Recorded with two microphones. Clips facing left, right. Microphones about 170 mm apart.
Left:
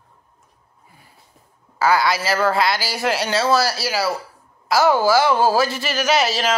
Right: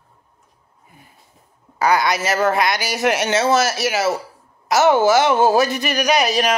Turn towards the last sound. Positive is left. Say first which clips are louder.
# right 2 dB
turn(degrees=-15)  # may be behind; listen again after turning